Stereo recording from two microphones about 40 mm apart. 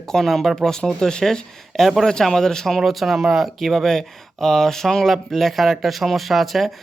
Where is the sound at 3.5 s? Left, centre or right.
Centre.